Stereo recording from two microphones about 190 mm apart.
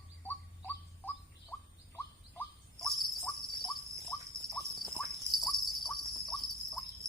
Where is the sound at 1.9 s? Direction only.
10° left (ahead or behind).